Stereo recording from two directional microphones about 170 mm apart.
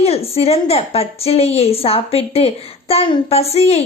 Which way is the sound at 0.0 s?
35° left (ahead or behind).